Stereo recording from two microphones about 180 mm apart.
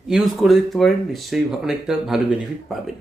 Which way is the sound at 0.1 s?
Centre (ahead or behind).